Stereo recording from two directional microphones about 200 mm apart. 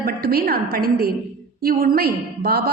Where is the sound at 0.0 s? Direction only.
50° right (ahead or behind).